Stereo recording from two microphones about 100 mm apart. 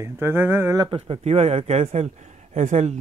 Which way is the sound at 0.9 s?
85° right.